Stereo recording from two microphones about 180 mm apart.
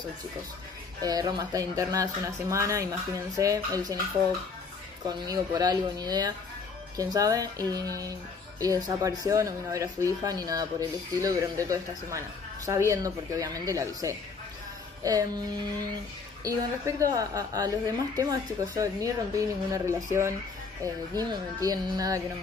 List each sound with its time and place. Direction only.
1.0 s a woman's voice: 20° right (ahead or behind)
5.0 s a woman's voice: 20° right (ahead or behind)
16.4 s a woman's voice: 20° right (ahead or behind)